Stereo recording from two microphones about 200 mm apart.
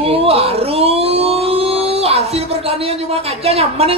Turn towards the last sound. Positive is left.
turn(degrees=-30)  # may be behind; listen again after turning